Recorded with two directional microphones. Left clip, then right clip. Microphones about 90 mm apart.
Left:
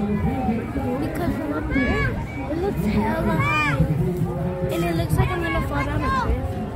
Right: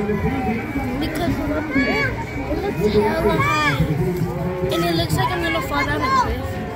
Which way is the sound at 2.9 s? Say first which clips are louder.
Right 8 dB; 10° left (ahead or behind).